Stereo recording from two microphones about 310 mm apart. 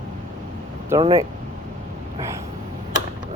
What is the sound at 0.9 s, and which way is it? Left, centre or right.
Speech, centre.